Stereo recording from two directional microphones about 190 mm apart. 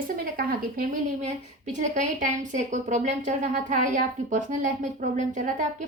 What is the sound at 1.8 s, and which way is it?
A woman's voice, 40° right (ahead or behind).